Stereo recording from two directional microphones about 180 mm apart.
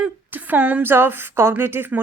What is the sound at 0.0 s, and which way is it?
A woman's voice, 10° right (ahead or behind).